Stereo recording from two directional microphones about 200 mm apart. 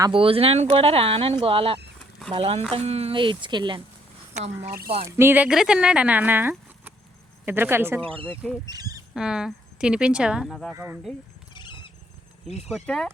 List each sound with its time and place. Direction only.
0.0 s speech: 25° right (ahead or behind)
4.4 s speech: 40° right (ahead or behind)
5.0 s speech: 10° right (ahead or behind)
9.1 s speech: 5° right (ahead or behind)
10.7 s speech: 10° right (ahead or behind)
11.5 s cat: 25° left (ahead or behind)
12.6 s speech: centre (ahead or behind)